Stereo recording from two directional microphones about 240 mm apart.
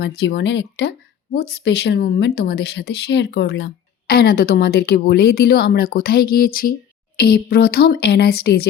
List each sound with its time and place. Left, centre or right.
0.0 s speech: left